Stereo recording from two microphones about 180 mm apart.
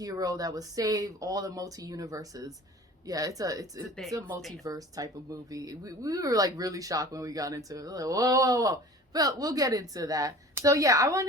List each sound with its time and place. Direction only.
0.0 s speech: 20° right (ahead or behind)